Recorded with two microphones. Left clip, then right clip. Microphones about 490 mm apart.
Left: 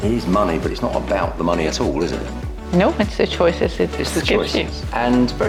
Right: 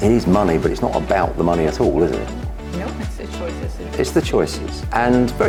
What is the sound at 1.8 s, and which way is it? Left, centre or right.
Speech, right.